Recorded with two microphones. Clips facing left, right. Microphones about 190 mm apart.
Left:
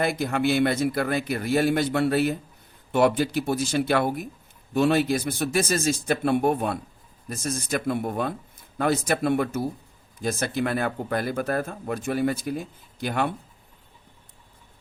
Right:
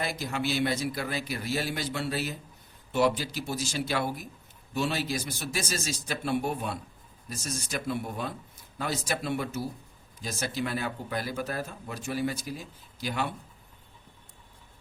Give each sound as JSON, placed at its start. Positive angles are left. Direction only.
{"t": 0.0, "sound": "speech", "side_deg": 55}